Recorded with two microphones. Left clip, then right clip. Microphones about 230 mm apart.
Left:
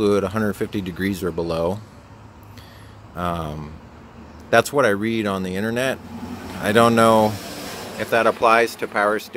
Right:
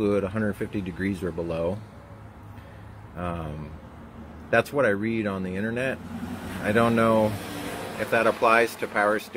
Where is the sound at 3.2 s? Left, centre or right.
Centre.